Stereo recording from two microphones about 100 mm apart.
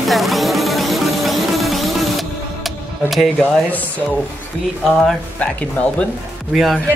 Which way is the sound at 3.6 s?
15° left (ahead or behind).